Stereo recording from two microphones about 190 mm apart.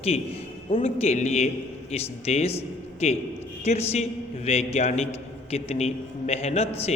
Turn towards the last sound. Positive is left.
turn(degrees=35)  # may be behind; listen again after turning